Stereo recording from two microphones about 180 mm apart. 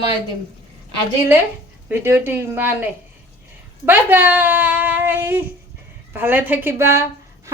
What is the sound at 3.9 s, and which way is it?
A woman's voice, 10° right (ahead or behind).